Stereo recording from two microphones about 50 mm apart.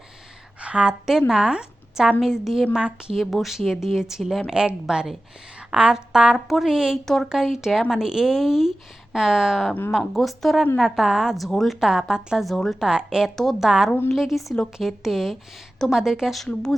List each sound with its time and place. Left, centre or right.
0.6 s a sound: right
1.3 s a woman's voice: centre
4.4 s a woman's voice: centre
7.0 s speech: centre
7.3 s speech: centre
11.5 s speech: centre
11.8 s speech: centre
12.5 s speech: centre
12.8 s speech: centre
13.3 s speech: centre
13.6 s speech: centre
16.3 s speech: centre